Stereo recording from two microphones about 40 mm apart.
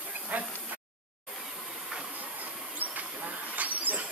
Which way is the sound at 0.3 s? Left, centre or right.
Right.